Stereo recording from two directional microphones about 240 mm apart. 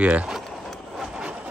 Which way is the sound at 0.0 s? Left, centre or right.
Centre.